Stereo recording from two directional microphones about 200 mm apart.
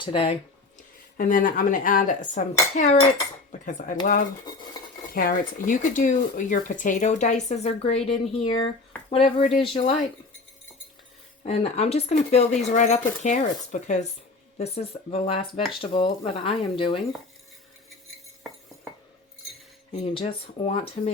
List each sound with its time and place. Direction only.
0.0 s speech: 25° left (ahead or behind)
1.1 s speech: 45° left (ahead or behind)
11.4 s speech: 35° left (ahead or behind)
19.9 s speech: 30° left (ahead or behind)